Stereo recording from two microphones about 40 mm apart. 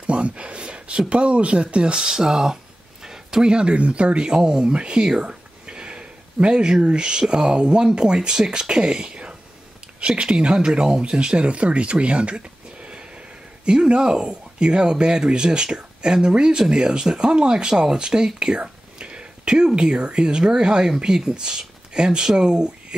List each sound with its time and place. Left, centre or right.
0.0 s speech: right